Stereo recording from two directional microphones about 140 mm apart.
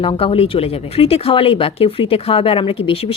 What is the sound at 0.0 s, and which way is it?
Speech, 40° left (ahead or behind).